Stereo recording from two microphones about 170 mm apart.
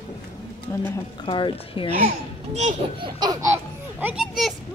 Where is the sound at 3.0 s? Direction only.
25° right (ahead or behind).